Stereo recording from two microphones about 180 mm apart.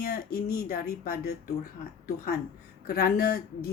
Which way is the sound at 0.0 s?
55° left (ahead or behind).